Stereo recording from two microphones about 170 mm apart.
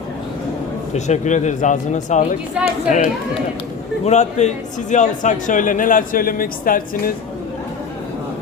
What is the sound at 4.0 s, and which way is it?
A man's voice, 40° left (ahead or behind).